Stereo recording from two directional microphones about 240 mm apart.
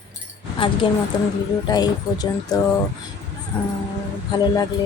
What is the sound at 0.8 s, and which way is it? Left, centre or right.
Speech, left.